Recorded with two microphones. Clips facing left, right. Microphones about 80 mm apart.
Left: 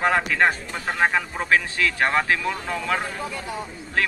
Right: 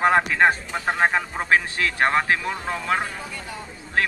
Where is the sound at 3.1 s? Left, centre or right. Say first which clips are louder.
Left 4 dB; centre.